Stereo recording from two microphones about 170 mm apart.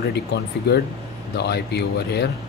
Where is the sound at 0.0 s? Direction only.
75° left (ahead or behind).